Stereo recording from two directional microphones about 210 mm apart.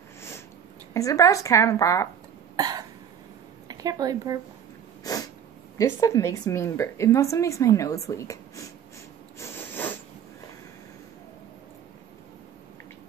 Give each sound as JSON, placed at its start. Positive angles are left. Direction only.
{"t": 0.9, "sound": "a woman's voice", "side_deg": 15}
{"t": 2.5, "sound": "cough", "side_deg": -20}
{"t": 3.6, "sound": "speech", "side_deg": -15}
{"t": 5.8, "sound": "a woman's voice", "side_deg": 15}
{"t": 9.4, "sound": "a sound", "side_deg": 10}